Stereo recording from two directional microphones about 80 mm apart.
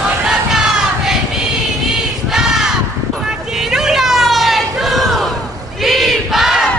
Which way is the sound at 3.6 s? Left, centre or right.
Centre.